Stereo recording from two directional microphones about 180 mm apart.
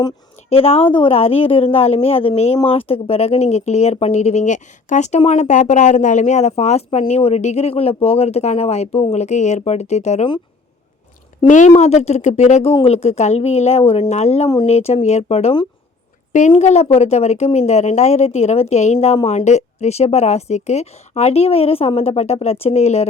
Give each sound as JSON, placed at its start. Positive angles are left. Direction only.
{"t": 0.5, "sound": "speech", "side_deg": 35}
{"t": 11.4, "sound": "speech", "side_deg": 45}